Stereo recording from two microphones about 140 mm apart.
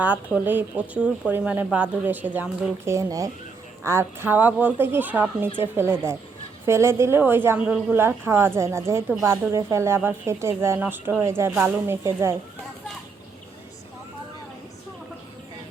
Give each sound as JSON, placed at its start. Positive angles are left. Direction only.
{"t": 0.0, "sound": "a woman's voice", "side_deg": -10}